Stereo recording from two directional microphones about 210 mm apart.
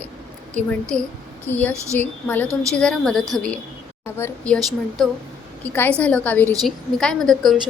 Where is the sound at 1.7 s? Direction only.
15° right (ahead or behind).